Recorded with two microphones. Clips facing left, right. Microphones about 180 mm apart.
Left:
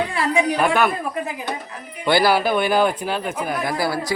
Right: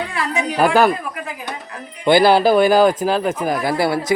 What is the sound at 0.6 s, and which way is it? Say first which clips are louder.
Speech: right 7 dB; 35° right (ahead or behind).